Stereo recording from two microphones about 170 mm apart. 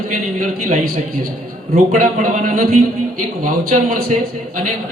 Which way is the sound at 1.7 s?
50° right (ahead or behind).